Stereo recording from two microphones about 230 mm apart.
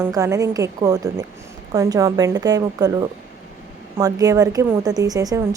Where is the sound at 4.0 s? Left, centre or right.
Centre.